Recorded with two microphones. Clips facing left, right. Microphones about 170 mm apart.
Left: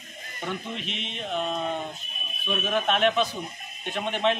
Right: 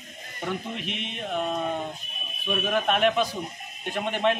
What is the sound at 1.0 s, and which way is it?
Speech, 10° right (ahead or behind).